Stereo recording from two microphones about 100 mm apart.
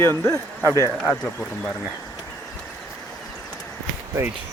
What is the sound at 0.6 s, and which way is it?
Speech, 35° right (ahead or behind).